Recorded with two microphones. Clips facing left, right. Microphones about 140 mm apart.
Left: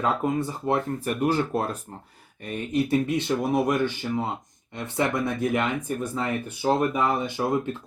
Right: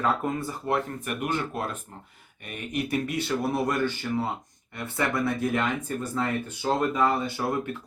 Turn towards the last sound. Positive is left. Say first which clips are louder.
# left 3 dB
turn(degrees=20)  # may be behind; listen again after turning